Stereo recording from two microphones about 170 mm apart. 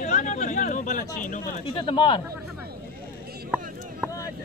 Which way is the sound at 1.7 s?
30° left (ahead or behind).